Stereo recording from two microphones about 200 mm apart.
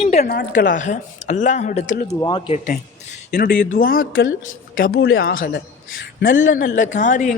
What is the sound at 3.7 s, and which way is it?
Speech, 45° left (ahead or behind).